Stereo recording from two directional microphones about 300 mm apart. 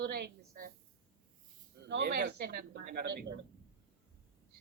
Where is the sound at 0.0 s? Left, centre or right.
Right.